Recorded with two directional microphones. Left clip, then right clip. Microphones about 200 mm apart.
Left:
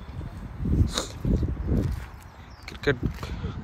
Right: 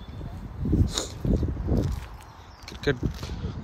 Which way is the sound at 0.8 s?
10° right (ahead or behind).